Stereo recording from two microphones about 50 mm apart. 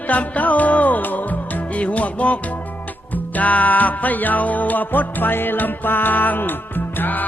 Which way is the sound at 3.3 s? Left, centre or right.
Left.